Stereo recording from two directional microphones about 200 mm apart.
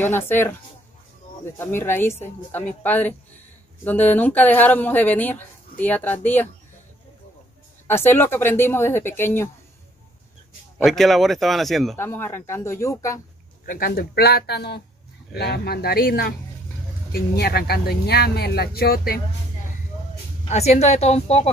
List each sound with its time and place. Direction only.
0.0 s speech: 10° left (ahead or behind)
1.6 s speech: 10° left (ahead or behind)
7.8 s speech: 10° left (ahead or behind)
10.8 s a man's voice: centre (ahead or behind)
12.0 s speech: 10° left (ahead or behind)
13.7 s speech: 45° left (ahead or behind)
20.4 s speech: 35° left (ahead or behind)